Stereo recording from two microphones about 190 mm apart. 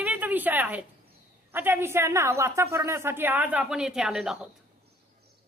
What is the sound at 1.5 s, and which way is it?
A woman's voice, 10° right (ahead or behind).